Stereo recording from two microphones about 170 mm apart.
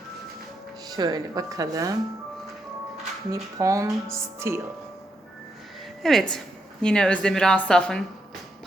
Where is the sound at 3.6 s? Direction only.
20° right (ahead or behind).